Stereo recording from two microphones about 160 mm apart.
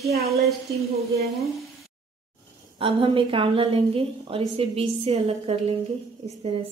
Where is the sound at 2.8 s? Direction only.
35° right (ahead or behind).